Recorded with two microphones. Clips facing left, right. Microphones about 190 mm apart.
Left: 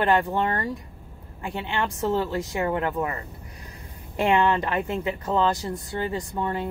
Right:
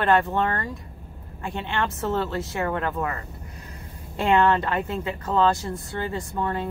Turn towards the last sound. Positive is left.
turn(degrees=15)  # may be behind; listen again after turning